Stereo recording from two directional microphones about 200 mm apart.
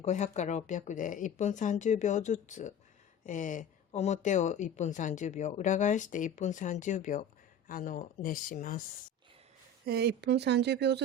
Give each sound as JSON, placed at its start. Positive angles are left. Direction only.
{"t": 0.0, "sound": "speech", "side_deg": 35}
{"t": 9.8, "sound": "speech", "side_deg": -55}